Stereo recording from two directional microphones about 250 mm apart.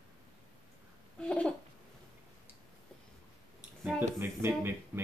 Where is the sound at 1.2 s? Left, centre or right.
Centre.